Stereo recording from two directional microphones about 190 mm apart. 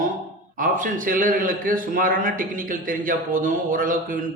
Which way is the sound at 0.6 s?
45° right (ahead or behind).